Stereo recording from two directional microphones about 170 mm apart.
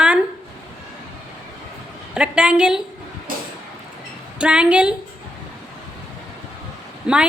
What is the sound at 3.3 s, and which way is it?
Vehicle, 55° right (ahead or behind).